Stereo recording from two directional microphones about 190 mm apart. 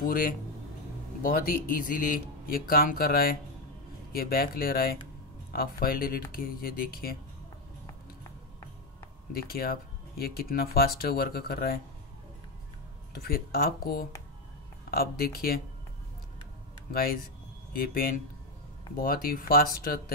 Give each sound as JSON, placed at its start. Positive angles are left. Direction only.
{"t": 0.0, "sound": "speech", "side_deg": 50}
{"t": 9.3, "sound": "speech", "side_deg": 50}
{"t": 13.1, "sound": "speech", "side_deg": 55}
{"t": 16.9, "sound": "speech", "side_deg": 50}